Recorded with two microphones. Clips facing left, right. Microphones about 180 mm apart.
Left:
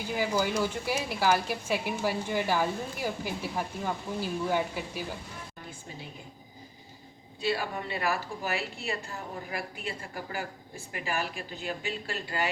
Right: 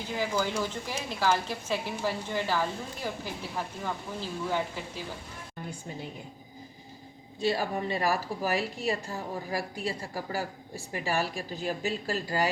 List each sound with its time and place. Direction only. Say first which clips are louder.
0.1 s speech: left 1 dB; 10° left (ahead or behind)
7.4 s a woman's voice: right 3 dB; 40° right (ahead or behind)
10.9 s a woman's voice: right 3 dB; 35° right (ahead or behind)